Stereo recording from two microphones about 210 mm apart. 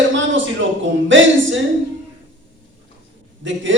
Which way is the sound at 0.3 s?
65° right (ahead or behind).